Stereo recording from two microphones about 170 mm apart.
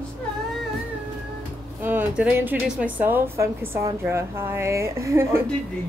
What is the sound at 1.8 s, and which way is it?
A woman's voice, 10° right (ahead or behind).